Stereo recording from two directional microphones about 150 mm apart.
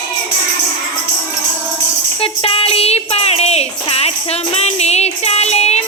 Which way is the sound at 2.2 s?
40° left (ahead or behind).